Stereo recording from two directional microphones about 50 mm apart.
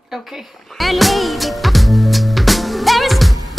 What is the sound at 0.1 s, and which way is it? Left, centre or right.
Music, centre.